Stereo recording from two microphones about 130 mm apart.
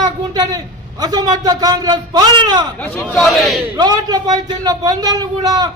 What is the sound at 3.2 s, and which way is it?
Speech, centre (ahead or behind).